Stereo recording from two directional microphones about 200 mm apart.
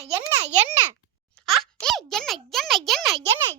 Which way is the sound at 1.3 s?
Centre (ahead or behind).